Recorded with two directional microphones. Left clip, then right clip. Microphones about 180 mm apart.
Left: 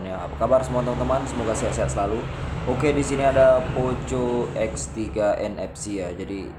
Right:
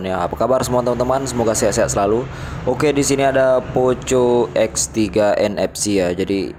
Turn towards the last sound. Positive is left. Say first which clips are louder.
# right 12 dB
turn(degrees=-45)  # may be behind; listen again after turning